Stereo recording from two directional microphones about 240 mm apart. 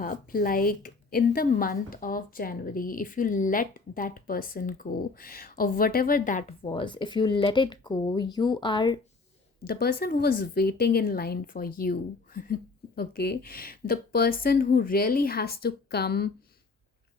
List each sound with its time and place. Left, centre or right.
0.0 s a woman's voice: left
6.7 s speech: centre
9.6 s a woman's voice: left